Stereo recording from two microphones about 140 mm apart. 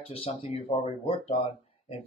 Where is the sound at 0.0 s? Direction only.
45° left (ahead or behind).